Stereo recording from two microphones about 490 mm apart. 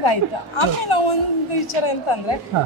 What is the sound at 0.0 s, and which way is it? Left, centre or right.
A woman's voice, left.